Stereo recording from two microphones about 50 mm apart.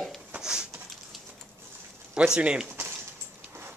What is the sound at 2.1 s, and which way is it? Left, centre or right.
Speech, centre.